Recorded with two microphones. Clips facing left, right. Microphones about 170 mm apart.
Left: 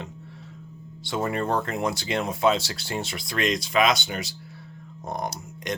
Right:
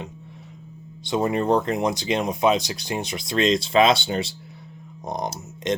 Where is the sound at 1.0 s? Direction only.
20° right (ahead or behind).